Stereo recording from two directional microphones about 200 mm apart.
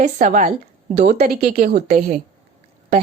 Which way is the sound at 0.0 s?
40° right (ahead or behind).